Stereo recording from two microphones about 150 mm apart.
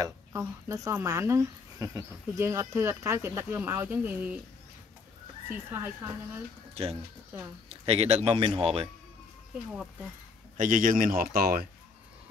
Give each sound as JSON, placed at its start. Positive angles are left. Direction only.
{"t": 0.0, "sound": "speech", "side_deg": -15}
{"t": 5.5, "sound": "speech", "side_deg": -15}
{"t": 6.7, "sound": "speech", "side_deg": -45}
{"t": 10.6, "sound": "speech", "side_deg": -65}